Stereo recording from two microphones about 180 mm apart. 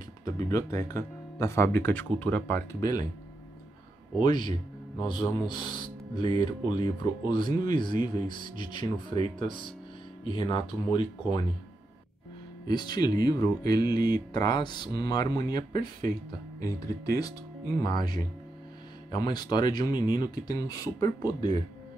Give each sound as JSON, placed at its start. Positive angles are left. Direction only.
{"t": 0.2, "sound": "speech", "side_deg": 20}
{"t": 4.2, "sound": "speech", "side_deg": 25}
{"t": 12.6, "sound": "speech", "side_deg": 25}